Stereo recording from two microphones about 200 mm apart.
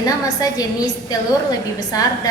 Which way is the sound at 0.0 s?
20° left (ahead or behind).